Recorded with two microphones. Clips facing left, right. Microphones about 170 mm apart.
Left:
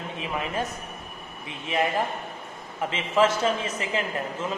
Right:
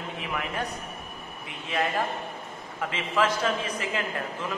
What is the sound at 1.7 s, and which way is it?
A man's voice, 20° left (ahead or behind).